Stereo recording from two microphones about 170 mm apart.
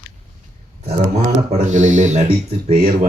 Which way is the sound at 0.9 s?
40° right (ahead or behind).